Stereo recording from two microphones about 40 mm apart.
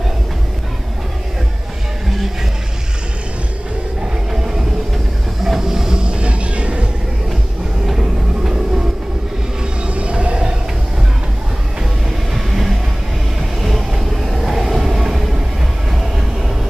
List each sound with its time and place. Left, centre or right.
2.0 s vehicle: centre
4.3 s train: centre; by 6.9 s right
7.8 s vehicle: centre
9.8 s vehicle: right
12.4 s vehicle: centre
13.4 s train: centre